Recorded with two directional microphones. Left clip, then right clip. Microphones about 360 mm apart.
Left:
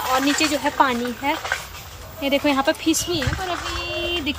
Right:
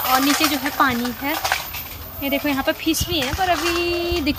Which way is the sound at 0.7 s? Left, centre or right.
Centre.